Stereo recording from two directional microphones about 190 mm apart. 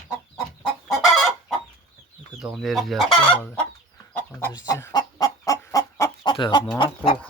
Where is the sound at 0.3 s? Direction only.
Centre (ahead or behind).